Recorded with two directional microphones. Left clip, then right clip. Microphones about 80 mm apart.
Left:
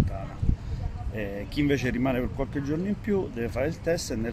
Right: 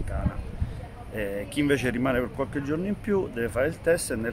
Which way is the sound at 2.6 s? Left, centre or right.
Centre.